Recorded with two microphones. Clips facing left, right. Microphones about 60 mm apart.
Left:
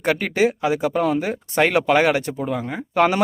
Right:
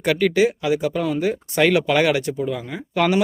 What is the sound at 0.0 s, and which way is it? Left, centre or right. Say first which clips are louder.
Speech: right 2 dB; left.